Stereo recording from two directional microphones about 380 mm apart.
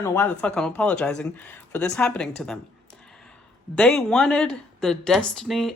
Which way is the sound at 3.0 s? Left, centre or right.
Centre.